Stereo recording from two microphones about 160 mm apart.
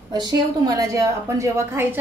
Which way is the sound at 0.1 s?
25° right (ahead or behind).